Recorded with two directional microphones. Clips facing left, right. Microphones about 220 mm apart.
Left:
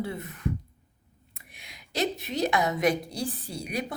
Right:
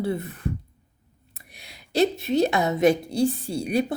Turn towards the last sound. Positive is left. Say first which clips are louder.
# right 9 dB
turn(degrees=-30)  # may be behind; listen again after turning